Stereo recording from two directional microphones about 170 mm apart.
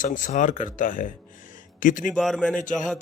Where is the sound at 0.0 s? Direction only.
50° left (ahead or behind).